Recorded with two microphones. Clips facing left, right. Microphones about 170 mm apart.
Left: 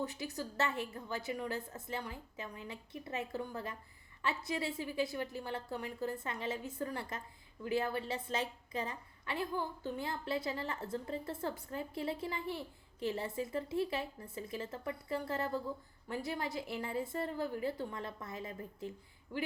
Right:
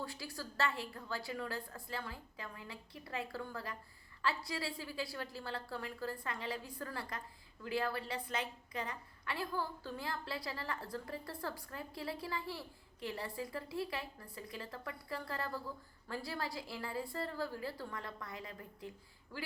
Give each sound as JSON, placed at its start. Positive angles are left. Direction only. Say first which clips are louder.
{"t": 0.0, "sound": "a woman's voice", "louder": "left 5 dB", "side_deg": 20}